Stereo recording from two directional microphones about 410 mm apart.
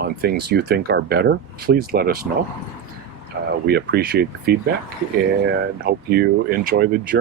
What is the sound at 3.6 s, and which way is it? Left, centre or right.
Speech, right.